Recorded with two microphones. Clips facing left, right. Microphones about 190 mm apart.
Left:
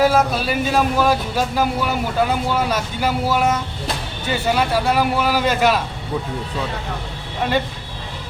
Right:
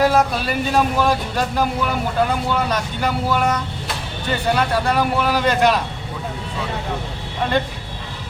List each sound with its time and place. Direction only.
0.0 s speech: centre (ahead or behind)